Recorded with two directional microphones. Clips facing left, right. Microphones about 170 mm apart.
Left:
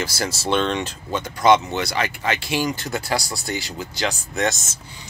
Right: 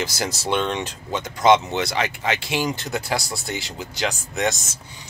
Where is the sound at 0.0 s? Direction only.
15° right (ahead or behind).